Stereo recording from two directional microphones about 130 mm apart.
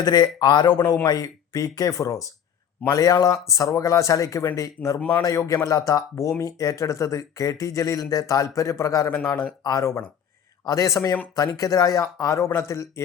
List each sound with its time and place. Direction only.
0.0 s a man's voice: 30° left (ahead or behind)
4.9 s a man's voice: 10° left (ahead or behind)
5.2 s a man's voice: 25° left (ahead or behind)